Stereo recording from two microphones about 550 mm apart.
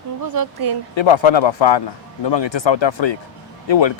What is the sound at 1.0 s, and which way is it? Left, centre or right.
Speech, left.